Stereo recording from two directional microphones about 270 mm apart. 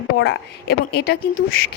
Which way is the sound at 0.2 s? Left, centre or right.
Left.